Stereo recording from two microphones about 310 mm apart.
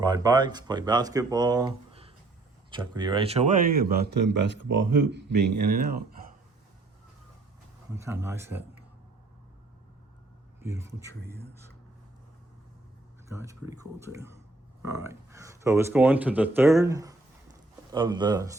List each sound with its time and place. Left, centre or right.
0.0 s speech: centre; by 5.8 s right
7.9 s speech: centre
10.6 s speech: centre
13.2 s speech: centre